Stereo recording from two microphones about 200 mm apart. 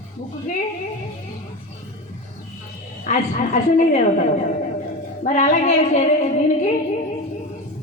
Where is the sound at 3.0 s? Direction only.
40° left (ahead or behind).